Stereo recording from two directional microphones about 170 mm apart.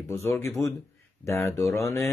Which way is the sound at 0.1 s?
15° left (ahead or behind).